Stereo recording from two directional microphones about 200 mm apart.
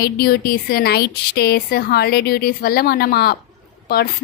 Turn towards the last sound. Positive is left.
turn(degrees=50)  # may be behind; listen again after turning